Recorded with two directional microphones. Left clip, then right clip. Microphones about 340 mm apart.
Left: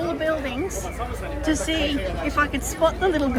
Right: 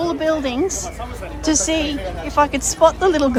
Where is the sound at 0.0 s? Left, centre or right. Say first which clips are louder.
Right 5 dB; centre.